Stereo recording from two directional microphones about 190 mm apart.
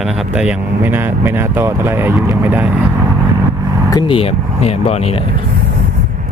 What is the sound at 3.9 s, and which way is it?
Speech, 25° left (ahead or behind).